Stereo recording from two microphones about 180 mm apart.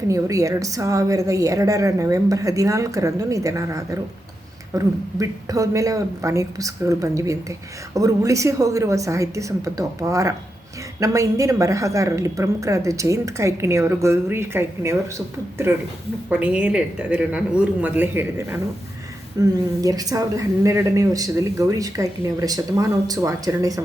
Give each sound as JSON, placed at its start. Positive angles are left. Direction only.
{"t": 0.1, "sound": "a woman's voice", "side_deg": -20}
{"t": 16.3, "sound": "a woman's voice", "side_deg": -5}
{"t": 19.4, "sound": "a woman's voice", "side_deg": -20}